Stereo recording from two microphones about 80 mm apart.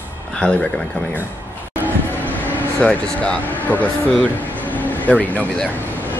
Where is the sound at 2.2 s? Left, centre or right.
Centre.